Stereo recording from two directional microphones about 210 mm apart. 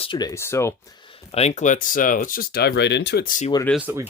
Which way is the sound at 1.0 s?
30° left (ahead or behind).